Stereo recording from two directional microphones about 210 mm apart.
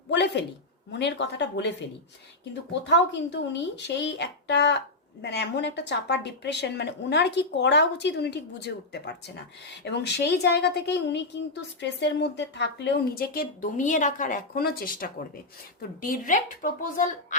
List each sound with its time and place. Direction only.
0.1 s a woman's voice: 55° left (ahead or behind); by 17.3 s 35° left (ahead or behind)